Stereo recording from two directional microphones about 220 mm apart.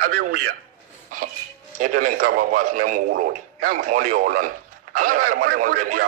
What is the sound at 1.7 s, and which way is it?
Speech, 40° right (ahead or behind).